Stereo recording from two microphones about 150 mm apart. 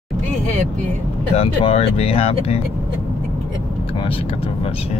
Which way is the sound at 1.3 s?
40° left (ahead or behind).